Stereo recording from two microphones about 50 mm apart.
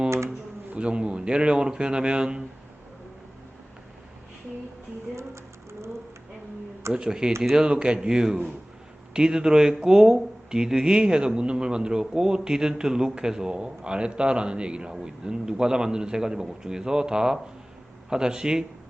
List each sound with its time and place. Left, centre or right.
0.8 s speech: right
6.9 s speech: centre